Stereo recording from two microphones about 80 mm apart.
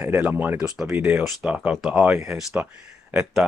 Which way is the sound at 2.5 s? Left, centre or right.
Right.